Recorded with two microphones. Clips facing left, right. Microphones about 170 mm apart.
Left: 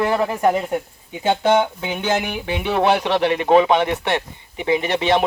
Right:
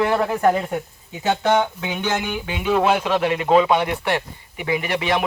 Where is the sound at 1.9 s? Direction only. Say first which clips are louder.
Left 2 dB; 30° left (ahead or behind).